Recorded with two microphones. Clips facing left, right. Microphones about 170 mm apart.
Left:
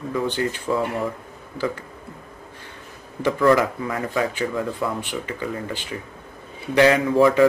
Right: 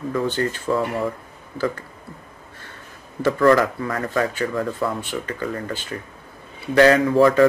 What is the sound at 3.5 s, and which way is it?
Speech, 15° left (ahead or behind).